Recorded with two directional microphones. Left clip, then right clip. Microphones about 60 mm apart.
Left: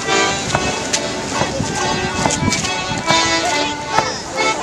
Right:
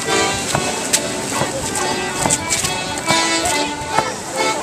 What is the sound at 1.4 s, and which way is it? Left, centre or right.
Music, left.